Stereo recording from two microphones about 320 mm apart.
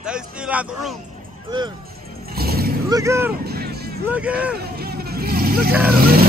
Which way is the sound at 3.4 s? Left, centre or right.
Right.